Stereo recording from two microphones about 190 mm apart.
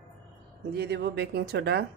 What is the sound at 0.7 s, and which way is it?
Speech, 60° right (ahead or behind).